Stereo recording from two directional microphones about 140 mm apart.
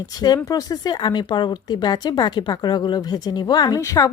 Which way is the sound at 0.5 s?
25° left (ahead or behind).